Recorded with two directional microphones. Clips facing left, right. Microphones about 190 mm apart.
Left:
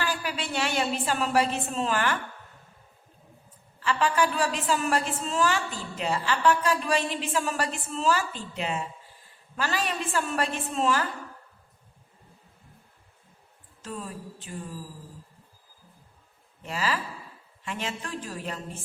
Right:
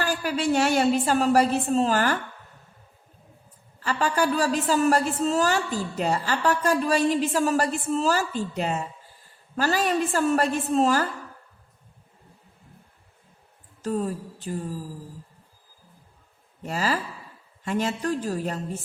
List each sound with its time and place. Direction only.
0.0 s a man's voice: 45° right (ahead or behind)
3.8 s a man's voice: 40° right (ahead or behind)
13.8 s a man's voice: 40° right (ahead or behind)
16.6 s a man's voice: 40° right (ahead or behind)